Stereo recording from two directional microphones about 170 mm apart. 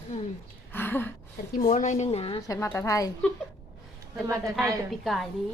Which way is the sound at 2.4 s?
20° left (ahead or behind).